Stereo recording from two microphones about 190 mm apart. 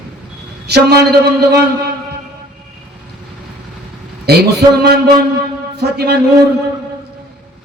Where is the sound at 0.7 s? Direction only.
55° right (ahead or behind).